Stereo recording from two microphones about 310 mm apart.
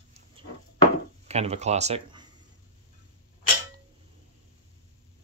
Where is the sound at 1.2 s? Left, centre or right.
Right.